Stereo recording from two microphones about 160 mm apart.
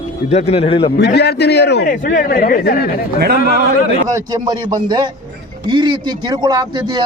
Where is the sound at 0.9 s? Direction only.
90° left; by 2.9 s 65° left (ahead or behind).